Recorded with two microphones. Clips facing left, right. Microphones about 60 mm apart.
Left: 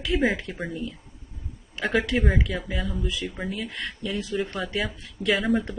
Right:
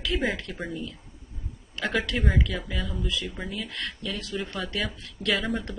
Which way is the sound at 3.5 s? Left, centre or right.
Centre.